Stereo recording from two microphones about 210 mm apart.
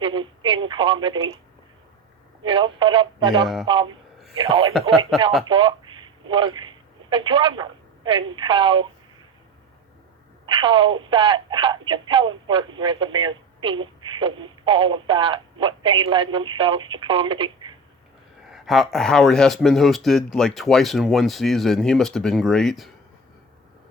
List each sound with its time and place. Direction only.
0.0 s telephone: 25° right (ahead or behind)
2.4 s a woman's voice: 25° right (ahead or behind)
10.4 s speech: 25° right (ahead or behind)
18.5 s speech: centre (ahead or behind)